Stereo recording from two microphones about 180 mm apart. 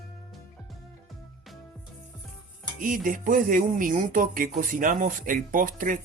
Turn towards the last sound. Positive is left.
turn(degrees=-50)  # may be behind; listen again after turning